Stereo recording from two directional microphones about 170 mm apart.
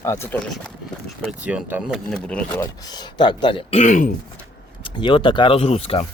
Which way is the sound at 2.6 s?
25° left (ahead or behind).